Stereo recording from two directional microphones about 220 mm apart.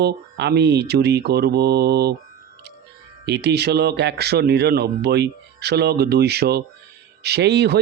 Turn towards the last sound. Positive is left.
turn(degrees=-50)  # may be behind; listen again after turning